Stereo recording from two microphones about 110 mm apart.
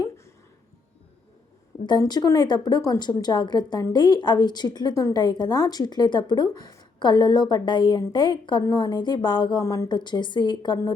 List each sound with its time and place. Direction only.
2.0 s a woman's voice: 35° left (ahead or behind)
8.6 s speech: 35° left (ahead or behind)
9.6 s a woman's voice: 30° left (ahead or behind)